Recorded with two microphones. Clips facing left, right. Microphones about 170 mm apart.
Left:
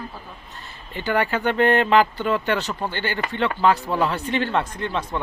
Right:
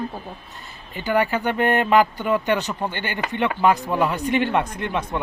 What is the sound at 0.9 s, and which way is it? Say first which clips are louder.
Speech: right 1 dB; 10° right (ahead or behind).